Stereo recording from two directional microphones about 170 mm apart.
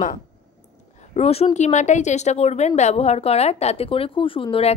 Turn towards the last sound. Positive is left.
turn(degrees=30)  # may be behind; listen again after turning